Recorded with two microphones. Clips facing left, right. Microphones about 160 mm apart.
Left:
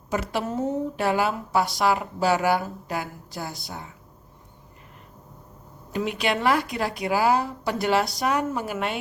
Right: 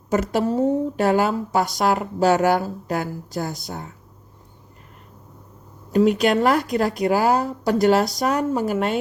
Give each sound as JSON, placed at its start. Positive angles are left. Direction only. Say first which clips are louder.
{"t": 0.1, "sound": "a woman's voice", "louder": "right 6 dB", "side_deg": -45}
{"t": 5.9, "sound": "a woman's voice", "louder": "right 9 dB", "side_deg": -45}